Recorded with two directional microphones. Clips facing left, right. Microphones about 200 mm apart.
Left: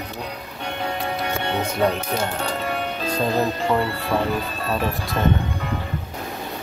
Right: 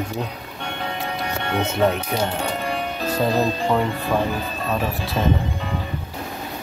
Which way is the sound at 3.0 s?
10° right (ahead or behind).